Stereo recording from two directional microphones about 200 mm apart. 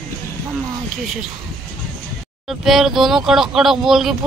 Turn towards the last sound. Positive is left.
turn(degrees=0)  # may be behind; listen again after turning